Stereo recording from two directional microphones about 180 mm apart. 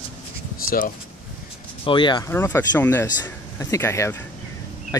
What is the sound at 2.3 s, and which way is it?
Speech, 15° left (ahead or behind).